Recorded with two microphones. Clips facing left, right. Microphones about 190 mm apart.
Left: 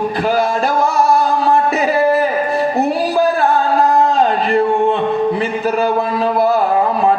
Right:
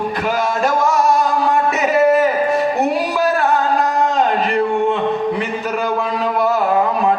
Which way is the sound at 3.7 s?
35° left (ahead or behind).